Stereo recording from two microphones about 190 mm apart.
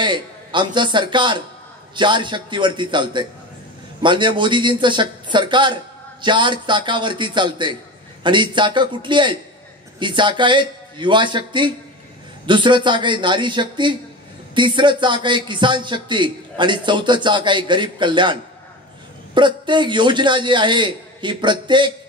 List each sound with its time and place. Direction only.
0.0 s a man's voice: 25° right (ahead or behind)